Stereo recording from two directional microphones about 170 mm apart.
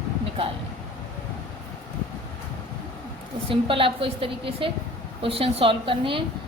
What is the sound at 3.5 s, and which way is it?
A woman's voice, 30° right (ahead or behind).